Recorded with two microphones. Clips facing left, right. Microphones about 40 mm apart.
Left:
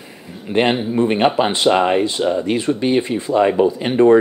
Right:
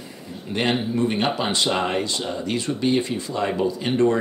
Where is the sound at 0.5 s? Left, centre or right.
Left.